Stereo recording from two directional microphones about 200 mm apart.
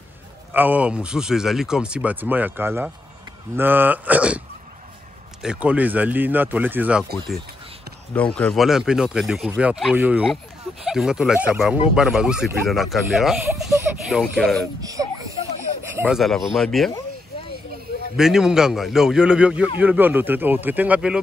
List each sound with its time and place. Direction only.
0.5 s speech: 10° right (ahead or behind)
5.4 s speech: 5° right (ahead or behind)
8.1 s speech: 5° left (ahead or behind)
14.8 s baby cry: 15° right (ahead or behind)
16.0 s speech: centre (ahead or behind)
18.1 s speech: centre (ahead or behind)